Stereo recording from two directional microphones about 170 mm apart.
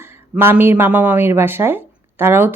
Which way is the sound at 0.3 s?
15° right (ahead or behind).